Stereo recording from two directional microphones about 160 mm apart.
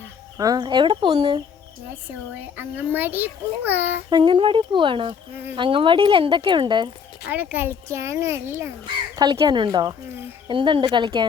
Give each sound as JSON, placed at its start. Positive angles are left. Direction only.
{"t": 0.3, "sound": "speech", "side_deg": -25}
{"t": 2.3, "sound": "a child's voice", "side_deg": -10}
{"t": 4.1, "sound": "speech", "side_deg": -30}
{"t": 7.3, "sound": "a child's voice", "side_deg": -10}
{"t": 9.1, "sound": "speech", "side_deg": -25}